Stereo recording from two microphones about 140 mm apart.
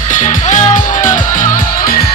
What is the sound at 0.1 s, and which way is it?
Music, 65° left (ahead or behind).